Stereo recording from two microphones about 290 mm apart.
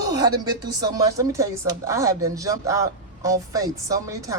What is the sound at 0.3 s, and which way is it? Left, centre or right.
Speech, centre.